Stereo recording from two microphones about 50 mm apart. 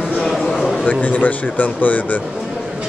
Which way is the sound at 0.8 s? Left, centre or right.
Left.